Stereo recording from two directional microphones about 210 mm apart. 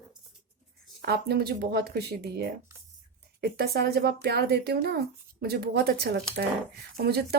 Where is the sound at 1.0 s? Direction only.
50° right (ahead or behind).